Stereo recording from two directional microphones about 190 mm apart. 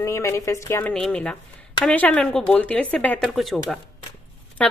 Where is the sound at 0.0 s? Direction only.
15° left (ahead or behind).